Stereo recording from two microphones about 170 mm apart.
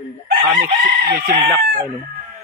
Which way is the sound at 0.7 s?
65° right (ahead or behind).